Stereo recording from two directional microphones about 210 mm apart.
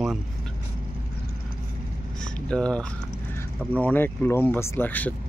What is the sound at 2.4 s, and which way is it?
Speech, 5° left (ahead or behind).